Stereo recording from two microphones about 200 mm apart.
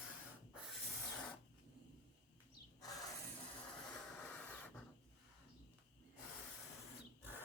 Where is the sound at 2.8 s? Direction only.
20° left (ahead or behind).